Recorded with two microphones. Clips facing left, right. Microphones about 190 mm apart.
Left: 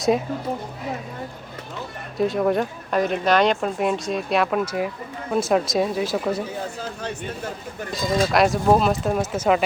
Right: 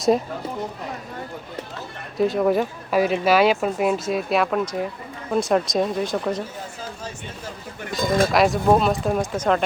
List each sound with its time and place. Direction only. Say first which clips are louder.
2.1 s speech: right 1 dB; centre (ahead or behind)
7.9 s speech: right 2 dB; 55° right (ahead or behind)
8.3 s speech: left 2 dB; centre (ahead or behind)